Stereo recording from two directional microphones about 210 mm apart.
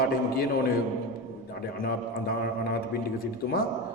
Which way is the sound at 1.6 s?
45° left (ahead or behind).